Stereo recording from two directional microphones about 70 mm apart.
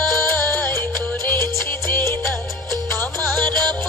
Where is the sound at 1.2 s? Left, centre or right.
Left.